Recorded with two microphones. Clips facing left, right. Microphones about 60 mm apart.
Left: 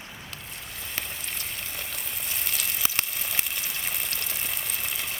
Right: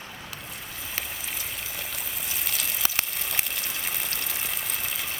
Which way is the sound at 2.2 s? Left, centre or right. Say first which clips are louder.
Even; centre.